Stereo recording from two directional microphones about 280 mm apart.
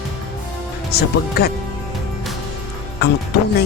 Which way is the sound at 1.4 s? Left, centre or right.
Left.